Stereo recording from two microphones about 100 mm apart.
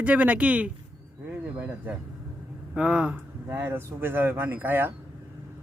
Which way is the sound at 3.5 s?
20° right (ahead or behind).